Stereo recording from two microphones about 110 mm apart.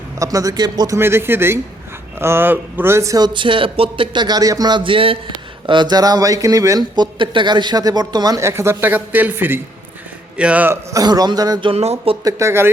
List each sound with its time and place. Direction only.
0.2 s speech: 30° right (ahead or behind)
0.9 s speech: 20° right (ahead or behind)
4.8 s a man's voice: 55° right (ahead or behind); by 10.8 s 15° right (ahead or behind)
10.9 s speech: 35° right (ahead or behind)
11.7 s speech: 70° right (ahead or behind)
12.2 s speech: 25° right (ahead or behind)